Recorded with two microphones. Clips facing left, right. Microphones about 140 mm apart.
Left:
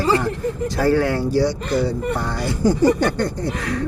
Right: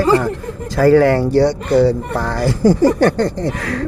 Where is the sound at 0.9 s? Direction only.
85° right.